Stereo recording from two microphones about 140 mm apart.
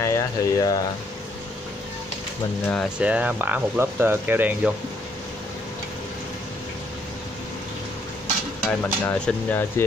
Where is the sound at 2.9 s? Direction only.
10° right (ahead or behind).